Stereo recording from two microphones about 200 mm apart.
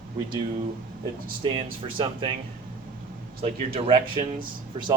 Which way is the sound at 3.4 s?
30° right (ahead or behind).